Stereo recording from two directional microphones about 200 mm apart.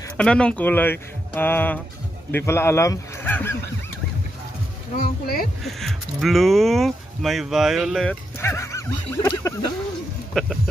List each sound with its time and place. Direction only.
0.2 s speech: 5° left (ahead or behind)
4.9 s speech: 50° left (ahead or behind)
5.6 s speech: centre (ahead or behind)
10.3 s speech: 5° left (ahead or behind)